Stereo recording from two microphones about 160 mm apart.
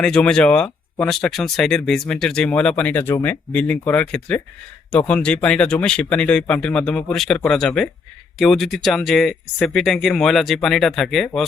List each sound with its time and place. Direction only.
0.0 s speech: 5° left (ahead or behind)